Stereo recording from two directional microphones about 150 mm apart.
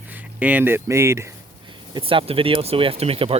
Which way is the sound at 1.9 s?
35° right (ahead or behind).